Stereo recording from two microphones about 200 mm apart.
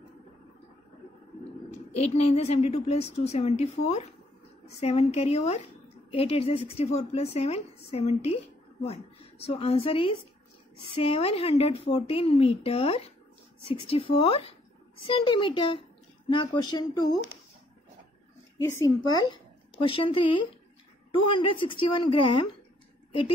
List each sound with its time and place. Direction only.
1.7 s a woman's voice: 30° left (ahead or behind)
18.6 s a woman's voice: 20° left (ahead or behind)